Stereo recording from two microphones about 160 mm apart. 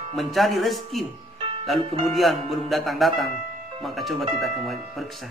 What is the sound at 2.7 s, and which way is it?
Speech, centre (ahead or behind).